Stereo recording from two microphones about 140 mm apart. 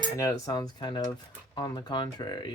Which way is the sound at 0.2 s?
25° left (ahead or behind).